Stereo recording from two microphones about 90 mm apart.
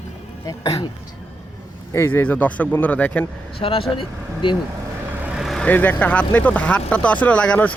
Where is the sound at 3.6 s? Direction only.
90° left.